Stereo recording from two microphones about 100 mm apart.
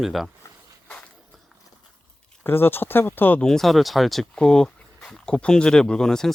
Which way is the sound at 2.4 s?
20° left (ahead or behind).